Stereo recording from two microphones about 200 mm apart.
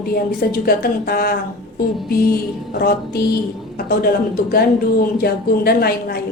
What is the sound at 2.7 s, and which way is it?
A woman's voice, 50° left (ahead or behind).